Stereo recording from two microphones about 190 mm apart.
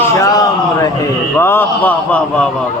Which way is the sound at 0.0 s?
20° left (ahead or behind).